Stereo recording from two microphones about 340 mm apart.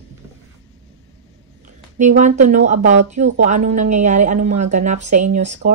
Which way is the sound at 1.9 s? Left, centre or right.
Right.